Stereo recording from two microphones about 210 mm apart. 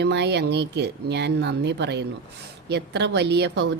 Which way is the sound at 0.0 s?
55° right (ahead or behind).